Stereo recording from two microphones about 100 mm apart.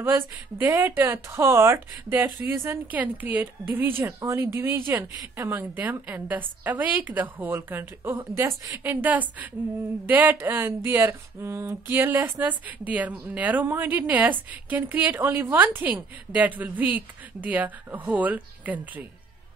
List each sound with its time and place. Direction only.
0.0 s a woman's voice: 20° right (ahead or behind)
8.9 s a woman's voice: 15° right (ahead or behind)